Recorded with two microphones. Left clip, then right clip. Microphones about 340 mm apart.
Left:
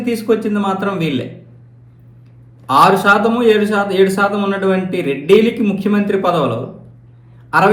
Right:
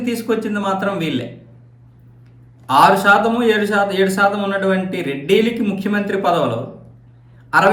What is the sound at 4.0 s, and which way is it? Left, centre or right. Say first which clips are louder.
Speech: left 2 dB; centre.